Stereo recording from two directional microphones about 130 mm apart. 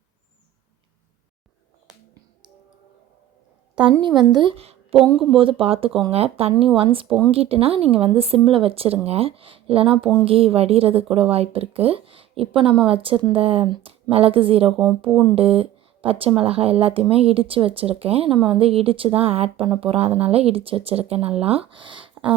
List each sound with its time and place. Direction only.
4.0 s speech: 30° right (ahead or behind)